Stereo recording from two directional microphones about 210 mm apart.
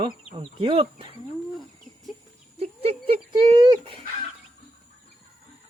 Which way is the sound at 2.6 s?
30° right (ahead or behind).